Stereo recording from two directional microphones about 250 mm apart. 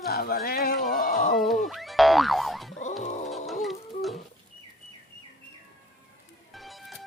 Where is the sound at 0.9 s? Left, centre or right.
Left.